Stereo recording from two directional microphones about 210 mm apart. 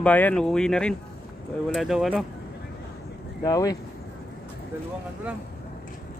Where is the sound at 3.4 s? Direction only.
15° left (ahead or behind).